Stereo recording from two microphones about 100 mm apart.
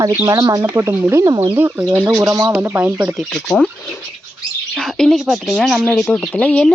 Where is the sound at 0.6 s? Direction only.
25° right (ahead or behind).